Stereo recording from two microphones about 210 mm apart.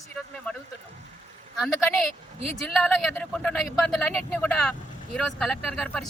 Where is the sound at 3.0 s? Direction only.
5° left (ahead or behind).